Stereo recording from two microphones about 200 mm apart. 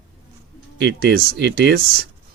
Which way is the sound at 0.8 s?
55° right (ahead or behind).